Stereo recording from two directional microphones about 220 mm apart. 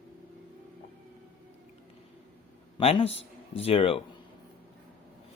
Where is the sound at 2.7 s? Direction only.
25° left (ahead or behind).